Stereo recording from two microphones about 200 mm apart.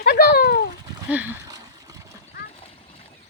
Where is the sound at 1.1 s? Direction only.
5° right (ahead or behind).